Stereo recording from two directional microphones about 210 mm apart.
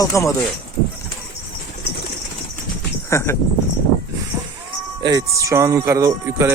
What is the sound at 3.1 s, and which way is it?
Speech, 15° left (ahead or behind).